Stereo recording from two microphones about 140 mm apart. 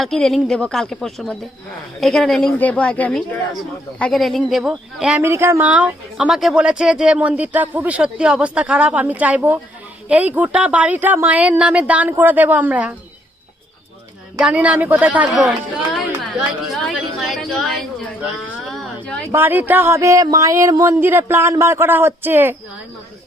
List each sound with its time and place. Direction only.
0.0 s a woman's voice: 5° left (ahead or behind)
5.2 s speech: 20° right (ahead or behind)
14.4 s a woman's voice: 10° right (ahead or behind)
18.6 s a sound: centre (ahead or behind)
19.3 s speech: 15° right (ahead or behind)